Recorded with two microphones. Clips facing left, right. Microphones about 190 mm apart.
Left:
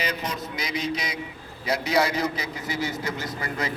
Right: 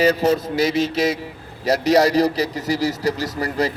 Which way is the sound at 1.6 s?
40° right (ahead or behind).